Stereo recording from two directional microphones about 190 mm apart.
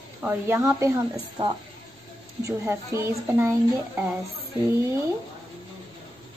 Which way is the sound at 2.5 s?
15° right (ahead or behind).